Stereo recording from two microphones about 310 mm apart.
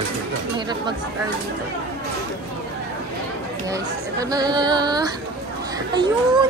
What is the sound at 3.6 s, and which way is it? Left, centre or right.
Speech, centre.